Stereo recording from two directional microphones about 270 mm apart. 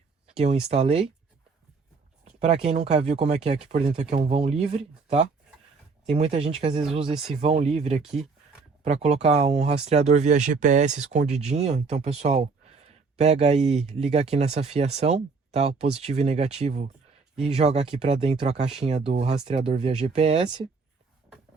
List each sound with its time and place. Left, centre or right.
0.3 s speech: right
2.4 s speech: right